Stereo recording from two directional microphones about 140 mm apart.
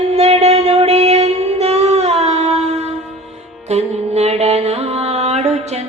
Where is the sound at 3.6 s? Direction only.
50° right (ahead or behind).